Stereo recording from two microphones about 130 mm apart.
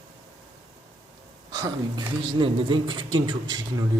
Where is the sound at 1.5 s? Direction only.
30° right (ahead or behind).